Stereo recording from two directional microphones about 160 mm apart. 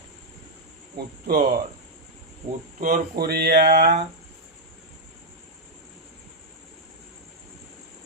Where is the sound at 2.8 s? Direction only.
55° right (ahead or behind); by 4.0 s 85° right.